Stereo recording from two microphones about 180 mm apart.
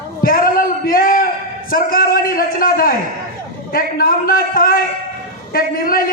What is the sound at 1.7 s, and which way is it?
A man's voice, 55° left (ahead or behind).